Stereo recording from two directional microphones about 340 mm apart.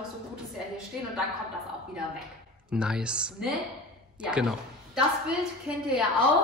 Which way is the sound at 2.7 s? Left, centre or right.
Centre.